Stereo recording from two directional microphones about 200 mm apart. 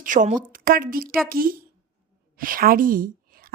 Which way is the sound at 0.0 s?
40° right (ahead or behind).